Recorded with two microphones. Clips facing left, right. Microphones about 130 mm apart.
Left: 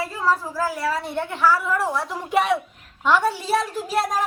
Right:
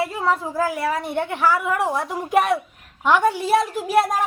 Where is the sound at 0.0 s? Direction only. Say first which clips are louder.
Right 1 dB; 20° right (ahead or behind).